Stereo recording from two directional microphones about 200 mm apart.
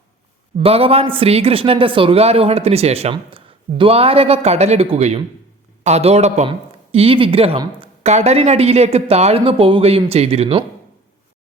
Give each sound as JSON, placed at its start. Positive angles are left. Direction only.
{"t": 0.6, "sound": "a man's voice", "side_deg": -30}